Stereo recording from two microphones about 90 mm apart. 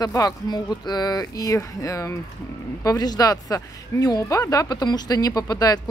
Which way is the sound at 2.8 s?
45° left (ahead or behind).